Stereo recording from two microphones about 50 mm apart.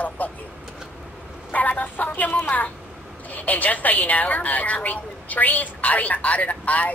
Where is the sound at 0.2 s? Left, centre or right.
Left.